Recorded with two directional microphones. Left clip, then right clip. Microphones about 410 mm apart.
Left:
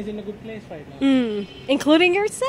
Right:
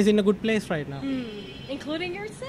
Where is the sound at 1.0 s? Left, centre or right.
Left.